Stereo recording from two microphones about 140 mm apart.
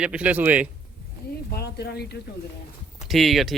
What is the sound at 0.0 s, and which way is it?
Speech, 10° right (ahead or behind).